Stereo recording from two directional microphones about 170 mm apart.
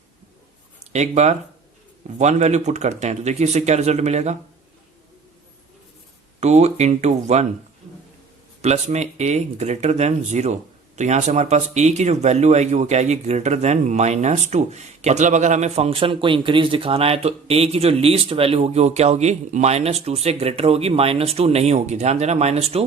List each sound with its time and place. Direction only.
0.9 s speech: 40° right (ahead or behind)
6.4 s speech: 40° right (ahead or behind)
8.6 s speech: 40° right (ahead or behind)